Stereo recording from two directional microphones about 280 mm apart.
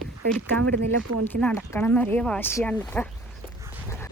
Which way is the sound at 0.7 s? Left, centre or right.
Right.